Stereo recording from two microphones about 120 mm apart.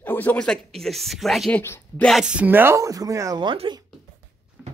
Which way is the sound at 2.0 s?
5° right (ahead or behind).